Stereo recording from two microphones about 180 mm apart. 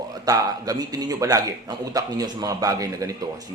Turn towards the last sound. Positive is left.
turn(degrees=-20)  # may be behind; listen again after turning